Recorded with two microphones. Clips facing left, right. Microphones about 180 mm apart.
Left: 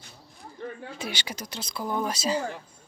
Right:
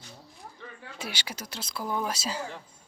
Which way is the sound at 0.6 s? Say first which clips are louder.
Left 11 dB; 50° left (ahead or behind).